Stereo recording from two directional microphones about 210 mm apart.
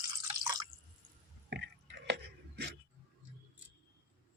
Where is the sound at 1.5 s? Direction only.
55° right (ahead or behind).